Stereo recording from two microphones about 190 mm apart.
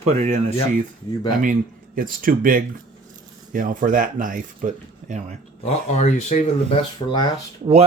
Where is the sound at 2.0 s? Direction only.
50° right (ahead or behind).